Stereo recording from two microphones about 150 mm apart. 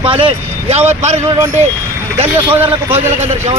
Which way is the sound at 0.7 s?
45° right (ahead or behind).